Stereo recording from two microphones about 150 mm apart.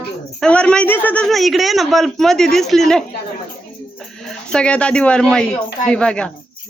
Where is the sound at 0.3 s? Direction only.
5° left (ahead or behind).